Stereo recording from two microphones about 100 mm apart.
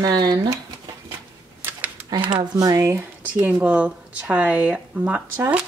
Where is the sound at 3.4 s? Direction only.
15° right (ahead or behind).